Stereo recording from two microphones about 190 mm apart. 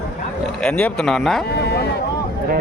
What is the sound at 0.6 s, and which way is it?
Speech, 5° left (ahead or behind).